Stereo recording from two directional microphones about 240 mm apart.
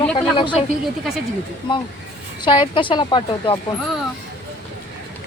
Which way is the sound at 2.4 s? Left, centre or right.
Centre.